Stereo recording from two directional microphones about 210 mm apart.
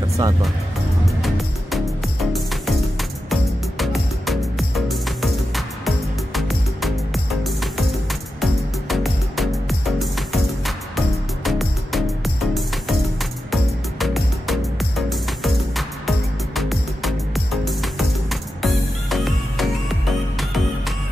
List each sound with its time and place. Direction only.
1.0 s music: centre (ahead or behind)